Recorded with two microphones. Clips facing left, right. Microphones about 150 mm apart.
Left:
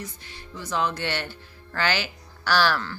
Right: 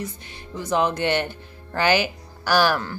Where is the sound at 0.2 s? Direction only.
20° right (ahead or behind).